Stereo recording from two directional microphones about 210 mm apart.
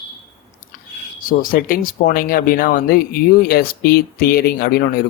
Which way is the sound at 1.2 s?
40° left (ahead or behind).